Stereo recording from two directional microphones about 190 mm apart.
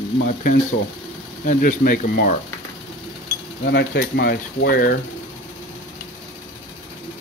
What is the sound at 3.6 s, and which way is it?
Speech, 60° left (ahead or behind).